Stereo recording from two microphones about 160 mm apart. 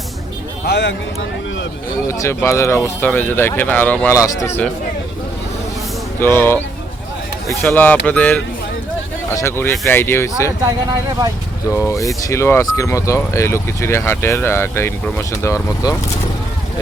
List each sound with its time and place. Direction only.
0.6 s speech: 90° left
2.0 s speech: 20° left (ahead or behind)
6.1 s speech: 10° left (ahead or behind)
11.7 s speech: 15° left (ahead or behind)